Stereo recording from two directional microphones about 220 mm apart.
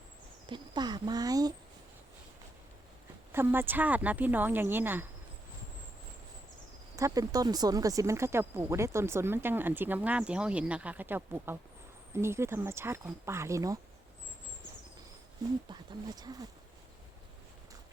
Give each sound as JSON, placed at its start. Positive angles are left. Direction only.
{"t": 0.4, "sound": "speech", "side_deg": -20}
{"t": 3.3, "sound": "speech", "side_deg": -10}
{"t": 6.9, "sound": "speech", "side_deg": -15}
{"t": 15.7, "sound": "speech", "side_deg": -20}